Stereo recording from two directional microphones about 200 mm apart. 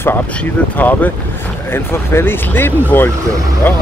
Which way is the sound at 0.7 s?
10° left (ahead or behind).